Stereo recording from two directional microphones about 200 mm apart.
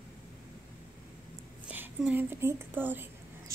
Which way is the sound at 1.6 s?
5° right (ahead or behind).